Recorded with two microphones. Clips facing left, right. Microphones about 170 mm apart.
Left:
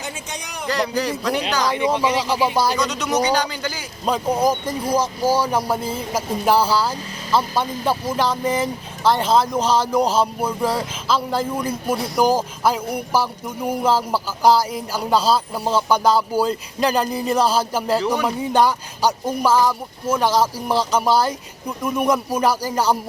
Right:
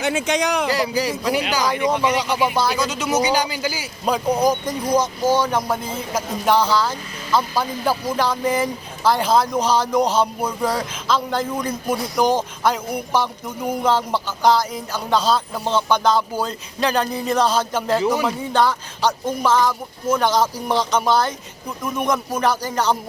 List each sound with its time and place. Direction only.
0.0 s speech: 80° right
0.7 s speech: 5° right (ahead or behind)
1.7 s speech: 25° left (ahead or behind)
2.7 s speech: centre (ahead or behind)
6.9 s vehicle: 30° left (ahead or behind)
7.5 s speech: centre (ahead or behind)